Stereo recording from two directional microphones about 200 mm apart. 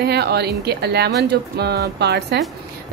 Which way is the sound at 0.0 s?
55° right (ahead or behind).